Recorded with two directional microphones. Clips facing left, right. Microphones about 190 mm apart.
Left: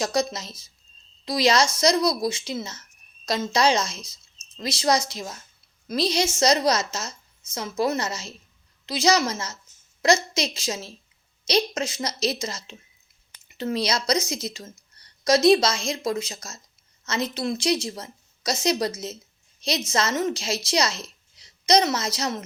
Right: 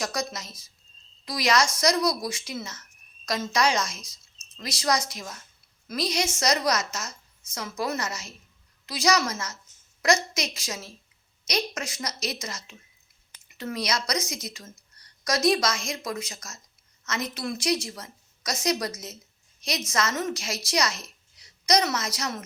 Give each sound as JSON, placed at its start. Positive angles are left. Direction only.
{"t": 0.0, "sound": "a woman's voice", "side_deg": 25}